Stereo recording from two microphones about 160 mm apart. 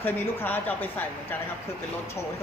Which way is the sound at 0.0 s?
10° left (ahead or behind).